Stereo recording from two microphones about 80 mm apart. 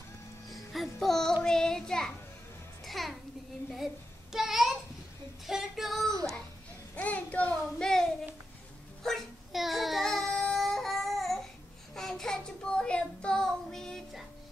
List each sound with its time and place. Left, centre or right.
0.5 s music: centre
1.4 s child singing: centre
2.8 s music: centre
4.3 s a sound: centre
5.5 s female singing: centre
7.0 s child singing: centre
7.5 s child singing: centre